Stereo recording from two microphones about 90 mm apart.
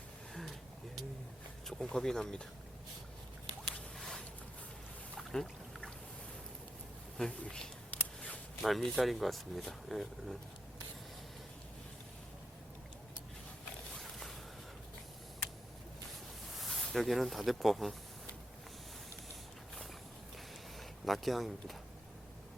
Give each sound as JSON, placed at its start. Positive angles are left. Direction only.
{"t": 1.6, "sound": "speech", "side_deg": 5}
{"t": 3.9, "sound": "a sound", "side_deg": 5}
{"t": 5.3, "sound": "pour", "side_deg": 5}
{"t": 7.2, "sound": "speech", "side_deg": 10}
{"t": 7.9, "sound": "a sound", "side_deg": 15}
{"t": 8.6, "sound": "speech", "side_deg": 0}
{"t": 13.9, "sound": "a sound", "side_deg": 0}
{"t": 16.5, "sound": "speech", "side_deg": 0}
{"t": 20.7, "sound": "speech", "side_deg": 0}